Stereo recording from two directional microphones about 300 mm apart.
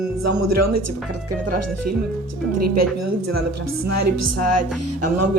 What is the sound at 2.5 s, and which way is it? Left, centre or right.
Speech, right.